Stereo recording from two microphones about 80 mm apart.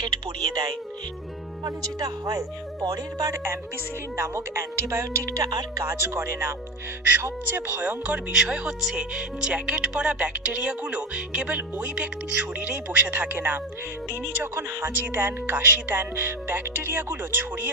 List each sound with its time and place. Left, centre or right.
0.0 s speech: right
4.2 s speech: right
5.8 s speech: right